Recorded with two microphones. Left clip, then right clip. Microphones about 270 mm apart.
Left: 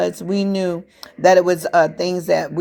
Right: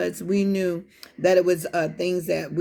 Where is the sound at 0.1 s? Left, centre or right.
Centre.